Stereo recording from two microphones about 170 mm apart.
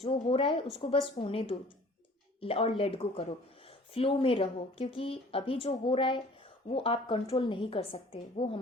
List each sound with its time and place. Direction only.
0.0 s a woman's voice: 35° left (ahead or behind)